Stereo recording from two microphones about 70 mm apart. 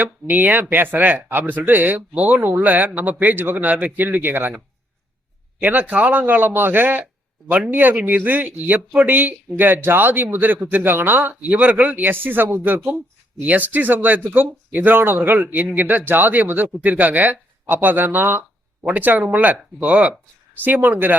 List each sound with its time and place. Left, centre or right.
0.0 s speech: right
20.6 s speech: right